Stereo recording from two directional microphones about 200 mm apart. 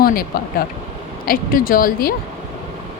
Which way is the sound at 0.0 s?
50° left (ahead or behind).